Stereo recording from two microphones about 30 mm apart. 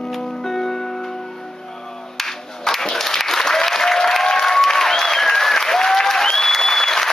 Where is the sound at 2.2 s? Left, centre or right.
Centre.